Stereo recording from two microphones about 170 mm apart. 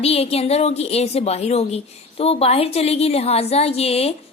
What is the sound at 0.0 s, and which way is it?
A woman's voice, 35° left (ahead or behind).